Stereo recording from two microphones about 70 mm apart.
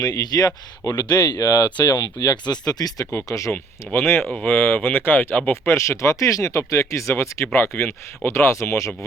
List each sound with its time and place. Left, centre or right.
0.0 s speech: left
3.2 s speech: left
3.5 s speech: left
7.4 s speech: left